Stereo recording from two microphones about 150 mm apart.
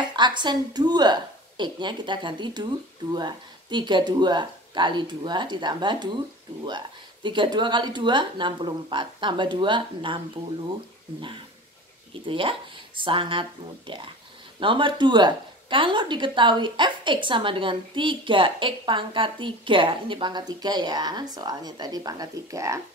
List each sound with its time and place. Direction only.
0.1 s a woman's voice: 30° right (ahead or behind)